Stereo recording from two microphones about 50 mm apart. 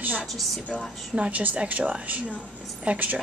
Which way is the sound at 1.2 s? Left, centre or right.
Right.